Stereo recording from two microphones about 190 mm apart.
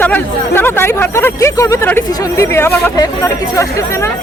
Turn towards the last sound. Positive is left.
turn(degrees=15)  # may be behind; listen again after turning